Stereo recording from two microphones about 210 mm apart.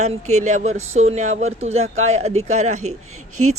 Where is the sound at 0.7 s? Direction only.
75° right (ahead or behind).